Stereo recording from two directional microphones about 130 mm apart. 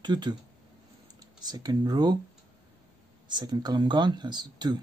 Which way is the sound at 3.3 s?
35° right (ahead or behind).